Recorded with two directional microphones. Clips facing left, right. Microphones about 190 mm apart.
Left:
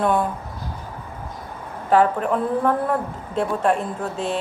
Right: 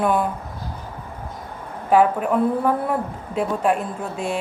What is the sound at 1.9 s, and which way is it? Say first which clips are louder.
A woman's voice: right 1 dB; 10° right (ahead or behind).